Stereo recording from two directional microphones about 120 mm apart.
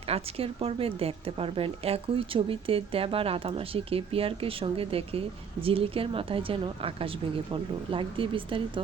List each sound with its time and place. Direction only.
0.1 s speech: 55° right (ahead or behind)